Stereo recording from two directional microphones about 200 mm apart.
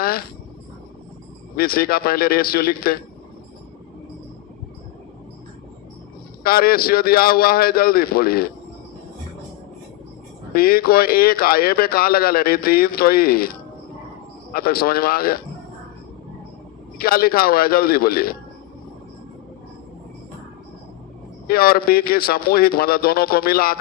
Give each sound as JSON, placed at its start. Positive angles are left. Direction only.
{"t": 1.5, "sound": "speech", "side_deg": 50}
{"t": 6.4, "sound": "speech", "side_deg": 50}
{"t": 10.5, "sound": "speech", "side_deg": 50}
{"t": 17.0, "sound": "speech", "side_deg": 50}
{"t": 21.4, "sound": "speech", "side_deg": 50}